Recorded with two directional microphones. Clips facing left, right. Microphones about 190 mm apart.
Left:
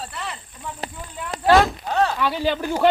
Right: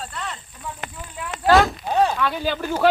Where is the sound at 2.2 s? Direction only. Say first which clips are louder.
Left 2 dB; 15° left (ahead or behind).